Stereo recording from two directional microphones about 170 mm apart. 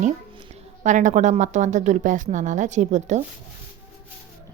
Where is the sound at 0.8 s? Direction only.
45° right (ahead or behind).